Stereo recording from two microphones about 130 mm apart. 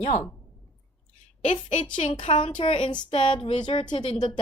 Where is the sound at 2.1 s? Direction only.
40° left (ahead or behind).